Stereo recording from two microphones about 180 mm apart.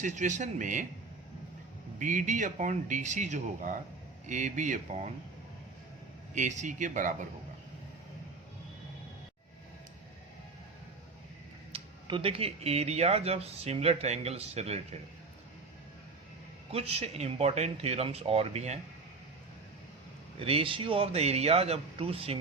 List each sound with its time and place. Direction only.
0.0 s speech: 45° right (ahead or behind)
2.0 s speech: 45° right (ahead or behind)
6.3 s speech: 40° right (ahead or behind)
11.7 s speech: 30° right (ahead or behind)
16.7 s speech: 35° right (ahead or behind)
20.4 s speech: 30° right (ahead or behind)